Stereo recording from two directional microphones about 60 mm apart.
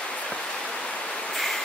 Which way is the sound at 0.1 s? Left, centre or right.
Centre.